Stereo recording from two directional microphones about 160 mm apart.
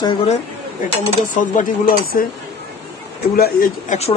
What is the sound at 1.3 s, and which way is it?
Speech, 55° left (ahead or behind).